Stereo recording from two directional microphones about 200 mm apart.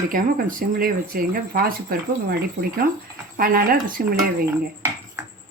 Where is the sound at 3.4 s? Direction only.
45° right (ahead or behind).